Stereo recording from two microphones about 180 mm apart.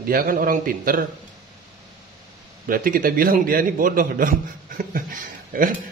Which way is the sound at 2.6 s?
50° right (ahead or behind).